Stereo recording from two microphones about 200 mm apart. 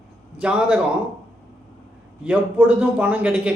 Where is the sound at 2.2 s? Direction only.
5° right (ahead or behind).